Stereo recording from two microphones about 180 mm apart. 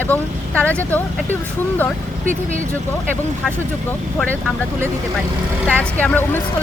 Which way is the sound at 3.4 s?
5° left (ahead or behind).